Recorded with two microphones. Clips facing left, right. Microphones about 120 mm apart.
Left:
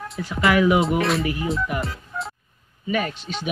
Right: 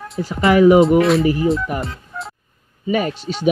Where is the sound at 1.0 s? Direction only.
Centre (ahead or behind).